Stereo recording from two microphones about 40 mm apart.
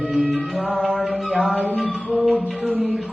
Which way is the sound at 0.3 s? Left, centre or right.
Centre.